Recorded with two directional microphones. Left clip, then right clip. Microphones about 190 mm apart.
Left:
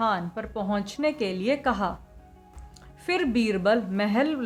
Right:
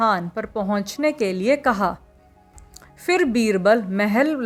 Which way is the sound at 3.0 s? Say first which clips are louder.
Right 6 dB; 40° right (ahead or behind).